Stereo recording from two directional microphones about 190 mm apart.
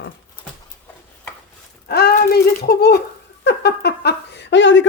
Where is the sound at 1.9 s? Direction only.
55° left (ahead or behind); by 4.9 s 75° left (ahead or behind).